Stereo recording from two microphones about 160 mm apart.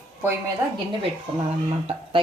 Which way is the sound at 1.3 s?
35° right (ahead or behind).